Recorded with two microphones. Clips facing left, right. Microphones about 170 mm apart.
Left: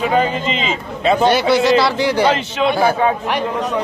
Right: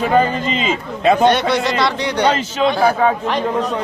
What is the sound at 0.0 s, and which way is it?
A man's voice, 40° right (ahead or behind).